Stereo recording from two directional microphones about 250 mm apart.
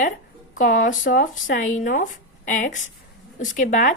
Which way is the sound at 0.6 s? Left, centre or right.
Left.